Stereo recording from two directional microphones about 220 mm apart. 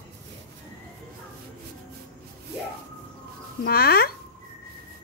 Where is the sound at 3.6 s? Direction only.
45° left (ahead or behind).